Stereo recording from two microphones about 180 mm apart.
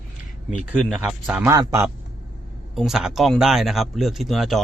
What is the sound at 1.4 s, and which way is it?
Speech, 15° right (ahead or behind).